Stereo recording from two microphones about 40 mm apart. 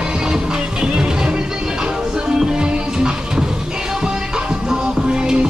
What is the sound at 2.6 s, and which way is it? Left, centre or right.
Music, right.